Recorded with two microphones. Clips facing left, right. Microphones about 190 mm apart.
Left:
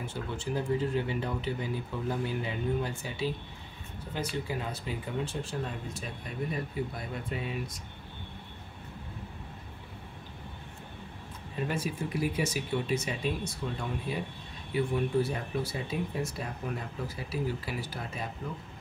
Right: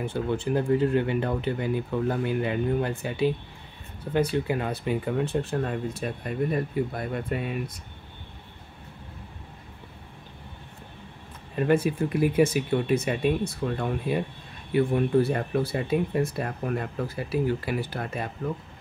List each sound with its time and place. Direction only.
0.0 s speech: 60° right (ahead or behind)
11.5 s speech: 60° right (ahead or behind)